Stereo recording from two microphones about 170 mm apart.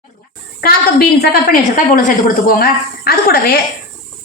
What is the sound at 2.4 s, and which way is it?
A woman's voice, 65° left (ahead or behind).